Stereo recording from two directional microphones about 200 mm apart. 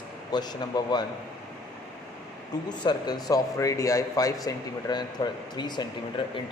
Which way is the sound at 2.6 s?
20° left (ahead or behind).